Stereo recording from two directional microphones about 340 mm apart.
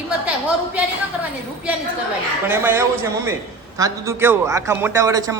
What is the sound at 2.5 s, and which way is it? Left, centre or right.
A woman's voice, centre.